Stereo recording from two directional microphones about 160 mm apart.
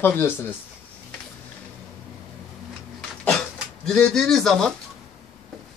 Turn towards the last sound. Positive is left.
turn(degrees=5)  # may be behind; listen again after turning